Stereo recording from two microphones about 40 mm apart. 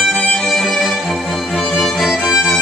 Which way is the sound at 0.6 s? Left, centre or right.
Centre.